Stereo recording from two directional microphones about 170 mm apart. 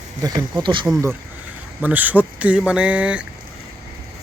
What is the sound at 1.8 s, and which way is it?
Speech, 10° right (ahead or behind).